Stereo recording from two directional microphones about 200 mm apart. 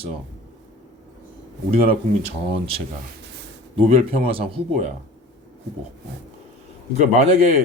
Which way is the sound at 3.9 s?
25° right (ahead or behind).